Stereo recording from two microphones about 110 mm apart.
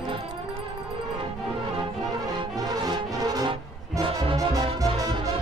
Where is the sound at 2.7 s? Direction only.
35° right (ahead or behind).